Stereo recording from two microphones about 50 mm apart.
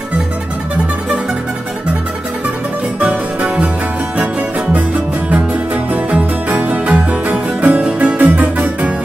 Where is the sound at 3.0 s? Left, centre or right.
Right.